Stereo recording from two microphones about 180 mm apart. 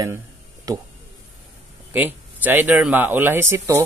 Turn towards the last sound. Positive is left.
turn(degrees=-15)  # may be behind; listen again after turning